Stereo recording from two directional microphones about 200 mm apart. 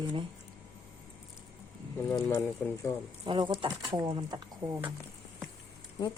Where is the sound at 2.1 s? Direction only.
15° left (ahead or behind).